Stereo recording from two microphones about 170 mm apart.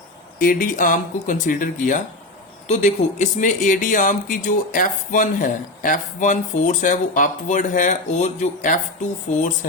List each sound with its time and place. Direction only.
0.3 s speech: 55° left (ahead or behind)